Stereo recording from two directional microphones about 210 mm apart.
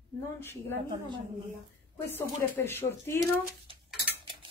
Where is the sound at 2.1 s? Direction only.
10° left (ahead or behind).